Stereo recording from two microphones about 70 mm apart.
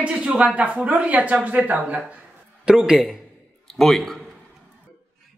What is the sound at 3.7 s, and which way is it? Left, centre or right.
Speech, centre.